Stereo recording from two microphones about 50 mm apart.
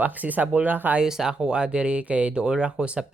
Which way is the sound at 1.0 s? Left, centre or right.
Centre.